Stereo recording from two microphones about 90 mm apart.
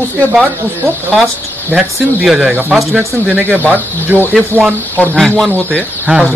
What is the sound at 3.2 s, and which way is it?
Speech, 20° right (ahead or behind).